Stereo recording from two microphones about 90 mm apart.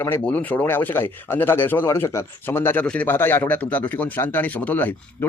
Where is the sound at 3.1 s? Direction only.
25° left (ahead or behind).